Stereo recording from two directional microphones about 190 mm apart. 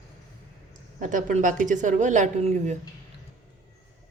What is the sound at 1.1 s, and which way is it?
A woman's voice, 40° right (ahead or behind).